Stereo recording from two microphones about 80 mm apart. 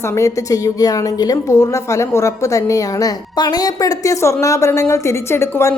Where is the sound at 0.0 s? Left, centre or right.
Left.